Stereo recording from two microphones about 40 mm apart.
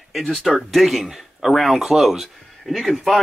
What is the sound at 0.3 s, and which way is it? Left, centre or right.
Speech, centre.